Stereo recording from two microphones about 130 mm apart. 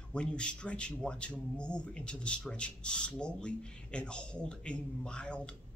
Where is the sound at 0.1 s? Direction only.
10° left (ahead or behind).